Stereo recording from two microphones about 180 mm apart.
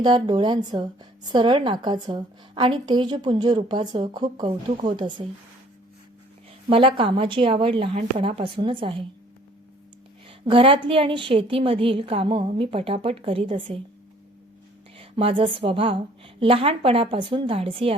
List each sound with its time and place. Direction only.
0.0 s a woman's voice: 25° right (ahead or behind)
6.7 s a woman's voice: 30° right (ahead or behind)
10.2 s a woman's voice: 30° right (ahead or behind)
14.9 s a woman's voice: 30° right (ahead or behind)